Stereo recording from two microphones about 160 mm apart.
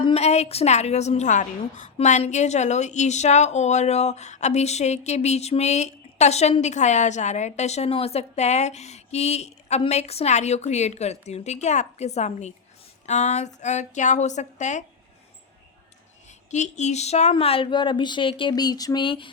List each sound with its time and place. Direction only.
0.0 s a woman's voice: 40° left (ahead or behind)
16.5 s speech: 45° left (ahead or behind); by 19.3 s 30° left (ahead or behind)